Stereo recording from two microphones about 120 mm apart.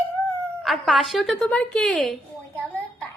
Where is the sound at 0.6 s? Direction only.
Centre (ahead or behind).